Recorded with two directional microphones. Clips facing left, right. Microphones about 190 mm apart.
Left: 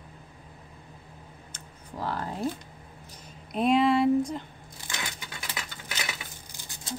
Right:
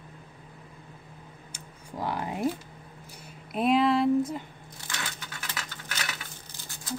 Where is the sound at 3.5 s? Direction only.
5° right (ahead or behind).